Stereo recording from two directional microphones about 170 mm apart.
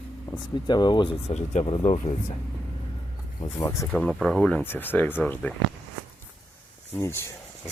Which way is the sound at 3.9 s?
5° left (ahead or behind).